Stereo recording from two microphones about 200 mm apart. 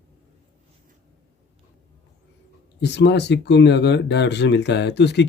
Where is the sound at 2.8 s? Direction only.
60° left (ahead or behind).